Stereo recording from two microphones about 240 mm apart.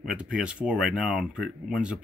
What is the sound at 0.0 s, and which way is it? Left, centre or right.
Speech, centre.